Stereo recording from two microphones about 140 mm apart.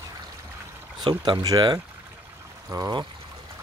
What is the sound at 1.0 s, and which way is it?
Speech, 30° right (ahead or behind).